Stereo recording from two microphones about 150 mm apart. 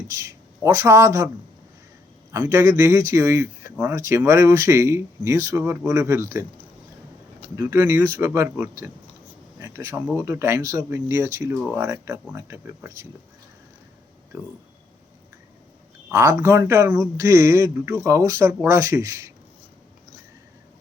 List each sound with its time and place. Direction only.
0.1 s speech: 20° right (ahead or behind)
2.3 s speech: 20° right (ahead or behind)
7.5 s speech: 20° right (ahead or behind)
16.1 s speech: 15° right (ahead or behind)